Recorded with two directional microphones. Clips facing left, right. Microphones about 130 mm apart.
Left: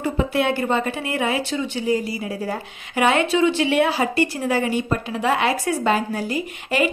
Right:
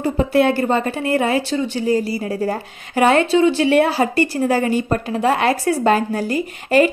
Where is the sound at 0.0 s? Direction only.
40° right (ahead or behind).